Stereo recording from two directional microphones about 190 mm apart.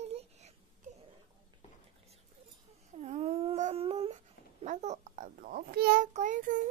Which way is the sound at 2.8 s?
35° right (ahead or behind).